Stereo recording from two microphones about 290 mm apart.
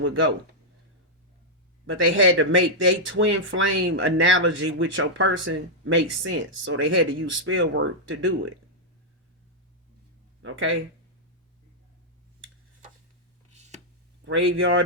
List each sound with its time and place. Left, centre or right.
1.9 s speech: right
10.4 s speech: right
13.5 s a sound: right
14.3 s speech: right